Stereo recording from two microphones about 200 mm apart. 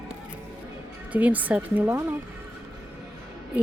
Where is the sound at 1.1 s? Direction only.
10° right (ahead or behind).